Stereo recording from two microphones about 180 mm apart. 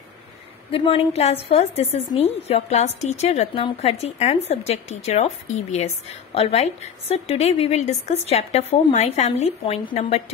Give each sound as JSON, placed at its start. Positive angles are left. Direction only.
{"t": 0.7, "sound": "a woman's voice", "side_deg": 30}